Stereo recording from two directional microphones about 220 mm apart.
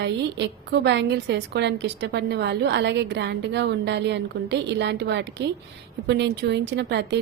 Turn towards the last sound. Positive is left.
turn(degrees=-50)  # may be behind; listen again after turning